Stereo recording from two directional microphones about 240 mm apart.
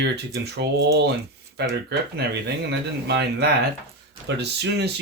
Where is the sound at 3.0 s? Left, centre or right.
Right.